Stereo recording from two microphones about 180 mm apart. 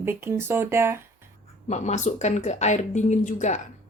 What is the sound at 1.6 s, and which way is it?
Speech, 40° left (ahead or behind).